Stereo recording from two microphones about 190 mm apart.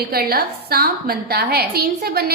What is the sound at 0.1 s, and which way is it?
A woman's voice, 55° right (ahead or behind).